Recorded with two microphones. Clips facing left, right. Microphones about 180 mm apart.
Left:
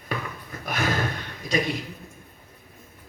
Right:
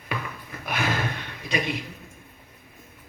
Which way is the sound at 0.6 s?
40° left (ahead or behind).